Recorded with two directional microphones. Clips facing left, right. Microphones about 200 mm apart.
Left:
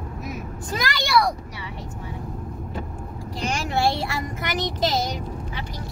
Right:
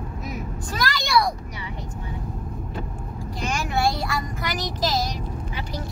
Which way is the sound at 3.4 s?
30° left (ahead or behind).